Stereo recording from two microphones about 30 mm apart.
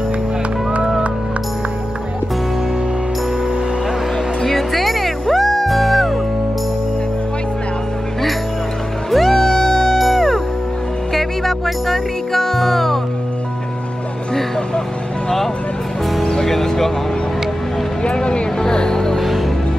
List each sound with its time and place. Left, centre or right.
4.4 s music: centre
9.1 s music: centre
9.9 s music: centre
16.4 s music: centre
18.0 s a sound: left
18.6 s music: left